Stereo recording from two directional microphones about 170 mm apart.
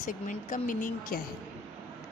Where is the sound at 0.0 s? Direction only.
50° left (ahead or behind).